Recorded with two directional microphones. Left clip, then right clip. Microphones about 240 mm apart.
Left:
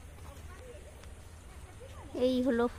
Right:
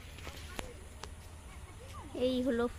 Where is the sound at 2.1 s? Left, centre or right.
Centre.